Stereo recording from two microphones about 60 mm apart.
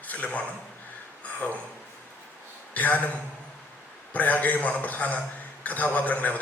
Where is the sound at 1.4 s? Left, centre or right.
Left.